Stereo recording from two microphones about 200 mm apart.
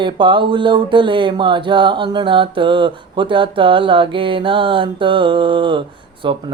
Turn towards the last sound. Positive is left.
turn(degrees=-25)  # may be behind; listen again after turning